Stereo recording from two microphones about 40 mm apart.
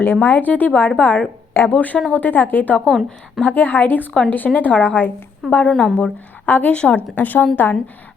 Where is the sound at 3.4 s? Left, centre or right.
Left.